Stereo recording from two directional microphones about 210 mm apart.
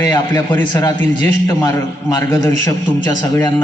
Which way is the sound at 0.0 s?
20° left (ahead or behind).